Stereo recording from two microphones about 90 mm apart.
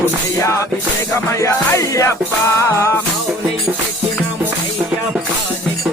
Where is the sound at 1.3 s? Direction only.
35° left (ahead or behind).